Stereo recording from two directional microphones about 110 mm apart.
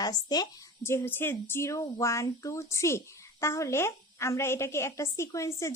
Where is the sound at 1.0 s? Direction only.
20° left (ahead or behind).